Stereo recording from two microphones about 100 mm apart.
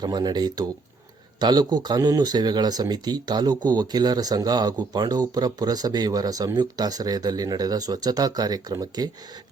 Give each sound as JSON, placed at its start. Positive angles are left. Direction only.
{"t": 0.0, "sound": "speech", "side_deg": -45}